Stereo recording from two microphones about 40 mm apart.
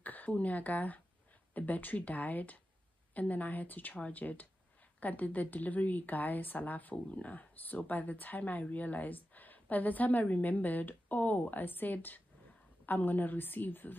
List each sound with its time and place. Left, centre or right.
0.0 s a woman's voice: left